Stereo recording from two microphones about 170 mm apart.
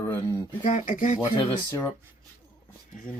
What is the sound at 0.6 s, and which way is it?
Speech, 45° left (ahead or behind).